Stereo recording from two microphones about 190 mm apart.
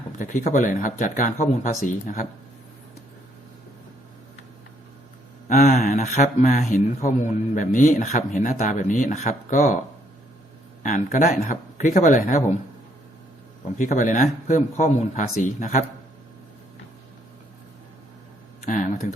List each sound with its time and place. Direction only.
0.2 s speech: 40° left (ahead or behind)
5.5 s speech: 40° left (ahead or behind)
10.8 s speech: 40° left (ahead or behind)
13.7 s speech: 45° left (ahead or behind)
18.6 s speech: 45° left (ahead or behind)